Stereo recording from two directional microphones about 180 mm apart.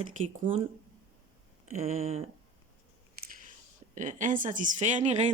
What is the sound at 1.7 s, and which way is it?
Speech, 35° right (ahead or behind).